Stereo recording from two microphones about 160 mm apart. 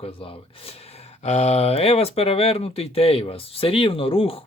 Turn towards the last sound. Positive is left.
turn(degrees=35)  # may be behind; listen again after turning